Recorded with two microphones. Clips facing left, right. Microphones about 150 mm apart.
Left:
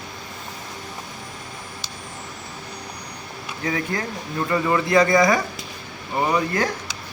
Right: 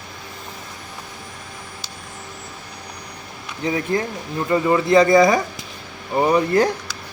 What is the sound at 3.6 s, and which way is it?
Speech, 25° right (ahead or behind).